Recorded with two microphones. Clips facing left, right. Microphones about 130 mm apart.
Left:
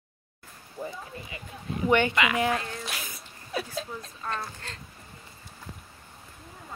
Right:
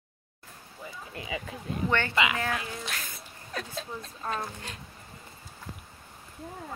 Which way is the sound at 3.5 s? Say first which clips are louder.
Left 3 dB; centre (ahead or behind).